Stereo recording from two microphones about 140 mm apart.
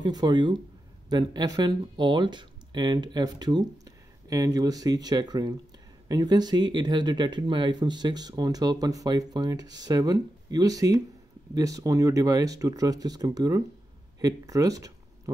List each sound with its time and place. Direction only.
0.0 s speech: 30° right (ahead or behind)